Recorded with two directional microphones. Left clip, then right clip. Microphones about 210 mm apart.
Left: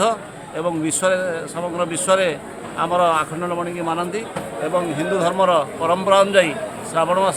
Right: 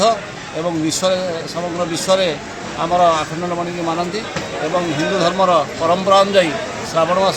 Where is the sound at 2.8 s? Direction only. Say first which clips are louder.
Right 4 dB; 25° left (ahead or behind).